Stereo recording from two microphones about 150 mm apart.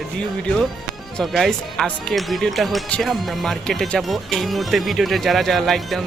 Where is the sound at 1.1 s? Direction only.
Centre (ahead or behind).